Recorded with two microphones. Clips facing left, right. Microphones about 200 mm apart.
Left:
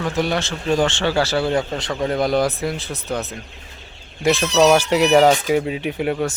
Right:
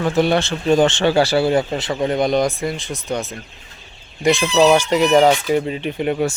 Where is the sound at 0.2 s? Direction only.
25° right (ahead or behind); by 6.1 s 5° left (ahead or behind).